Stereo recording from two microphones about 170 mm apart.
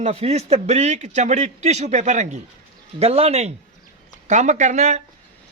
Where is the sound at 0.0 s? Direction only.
35° right (ahead or behind).